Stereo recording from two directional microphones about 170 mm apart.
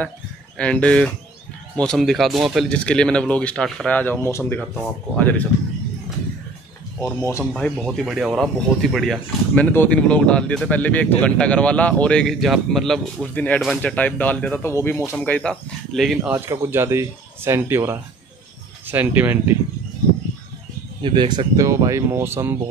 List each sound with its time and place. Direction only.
0.6 s speech: 5° left (ahead or behind)
7.2 s speech: 15° left (ahead or behind)
7.5 s speech: centre (ahead or behind)
16.2 s speech: 15° right (ahead or behind)
21.0 s speech: 30° right (ahead or behind)